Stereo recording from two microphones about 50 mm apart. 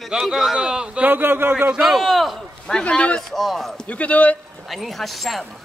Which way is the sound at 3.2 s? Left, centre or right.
Centre.